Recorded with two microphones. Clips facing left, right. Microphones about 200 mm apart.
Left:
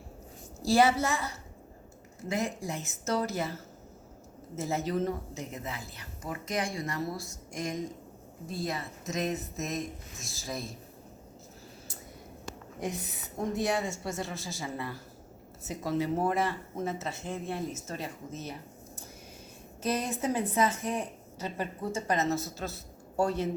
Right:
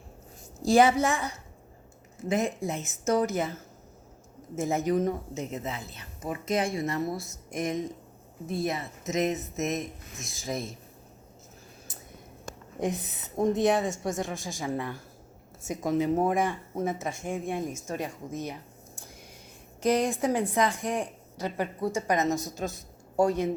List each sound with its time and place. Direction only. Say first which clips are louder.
0.6 s a woman's voice: right 3 dB; 15° right (ahead or behind)
12.8 s a woman's voice: right 5 dB; 20° right (ahead or behind)
19.8 s a woman's voice: right 6 dB; 15° right (ahead or behind)